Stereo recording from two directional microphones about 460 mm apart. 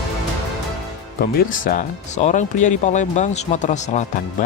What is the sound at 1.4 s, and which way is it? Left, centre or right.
Speech, centre.